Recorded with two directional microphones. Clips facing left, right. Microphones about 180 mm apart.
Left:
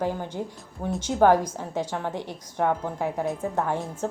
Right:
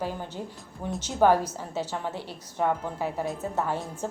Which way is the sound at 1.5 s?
15° left (ahead or behind).